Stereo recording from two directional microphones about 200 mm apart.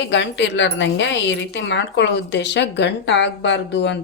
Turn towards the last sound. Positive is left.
turn(degrees=65)  # may be behind; listen again after turning